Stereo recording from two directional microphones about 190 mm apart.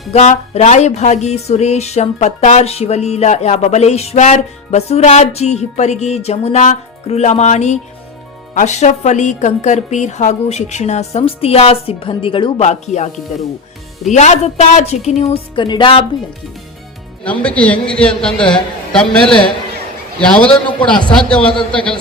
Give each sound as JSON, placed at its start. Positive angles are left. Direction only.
{"t": 0.1, "sound": "speech", "side_deg": 35}
{"t": 14.1, "sound": "speech", "side_deg": 35}
{"t": 17.2, "sound": "a man's voice", "side_deg": 5}
{"t": 21.4, "sound": "speech", "side_deg": 25}